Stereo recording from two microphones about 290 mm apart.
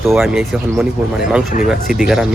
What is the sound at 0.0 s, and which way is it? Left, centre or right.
Speech, centre.